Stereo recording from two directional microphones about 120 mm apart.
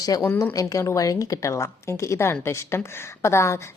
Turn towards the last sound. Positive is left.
turn(degrees=25)  # may be behind; listen again after turning